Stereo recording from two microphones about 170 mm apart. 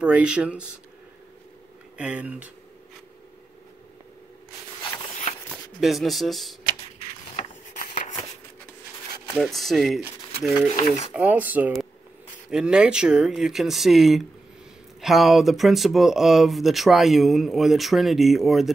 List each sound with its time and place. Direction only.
0.0 s speech: 5° right (ahead or behind)
2.0 s speech: 5° right (ahead or behind)
5.8 s speech: centre (ahead or behind)
7.3 s a sound: 45° left (ahead or behind)
9.3 s speech: centre (ahead or behind)
10.8 s speech: 40° left (ahead or behind)
11.1 s speech: 10° right (ahead or behind)